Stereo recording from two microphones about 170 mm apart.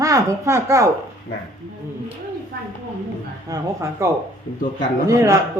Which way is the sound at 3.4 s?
20° right (ahead or behind).